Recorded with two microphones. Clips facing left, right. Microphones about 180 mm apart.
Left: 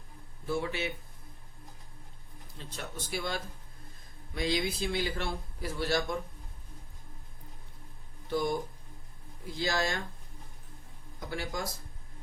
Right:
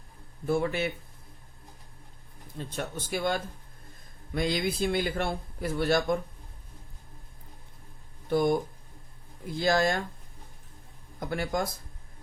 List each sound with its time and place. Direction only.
0.4 s speech: 50° right (ahead or behind)
2.6 s speech: 55° right (ahead or behind)
8.3 s speech: 55° right (ahead or behind)
9.6 s speech: 55° right (ahead or behind)
11.3 s speech: 55° right (ahead or behind)